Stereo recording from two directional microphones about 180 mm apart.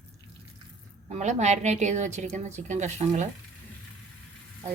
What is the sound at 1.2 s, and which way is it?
A woman's voice, 40° right (ahead or behind).